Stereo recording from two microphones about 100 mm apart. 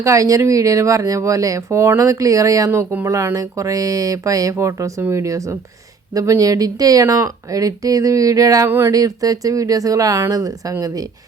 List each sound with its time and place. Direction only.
0.0 s speech: 35° right (ahead or behind)